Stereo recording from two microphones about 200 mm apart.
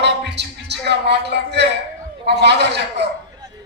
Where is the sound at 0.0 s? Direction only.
60° right (ahead or behind).